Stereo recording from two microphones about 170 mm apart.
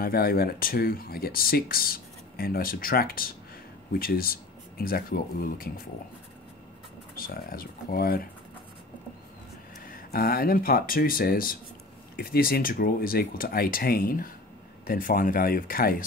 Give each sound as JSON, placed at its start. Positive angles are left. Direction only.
{"t": 0.0, "sound": "speech", "side_deg": 60}
{"t": 7.2, "sound": "speech", "side_deg": 60}
{"t": 9.8, "sound": "speech", "side_deg": 55}